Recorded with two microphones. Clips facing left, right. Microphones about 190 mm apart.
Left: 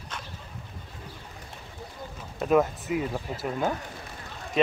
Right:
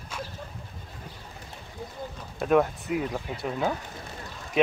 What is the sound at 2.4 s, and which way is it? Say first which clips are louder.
Speech: even; centre (ahead or behind).